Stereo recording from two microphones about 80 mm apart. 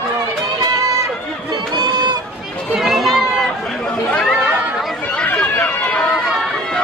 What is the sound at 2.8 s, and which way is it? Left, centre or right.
Run, centre.